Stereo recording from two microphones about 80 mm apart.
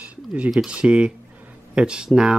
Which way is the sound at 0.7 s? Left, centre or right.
Centre.